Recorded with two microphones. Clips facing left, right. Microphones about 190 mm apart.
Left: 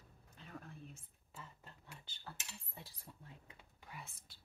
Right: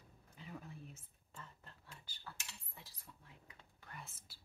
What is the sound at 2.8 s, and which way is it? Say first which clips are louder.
Speech: left 4 dB; 30° left (ahead or behind).